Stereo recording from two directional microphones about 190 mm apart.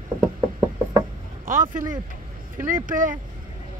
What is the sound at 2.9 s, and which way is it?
Speech, 45° right (ahead or behind).